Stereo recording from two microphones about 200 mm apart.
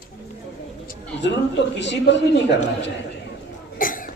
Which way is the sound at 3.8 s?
45° left (ahead or behind).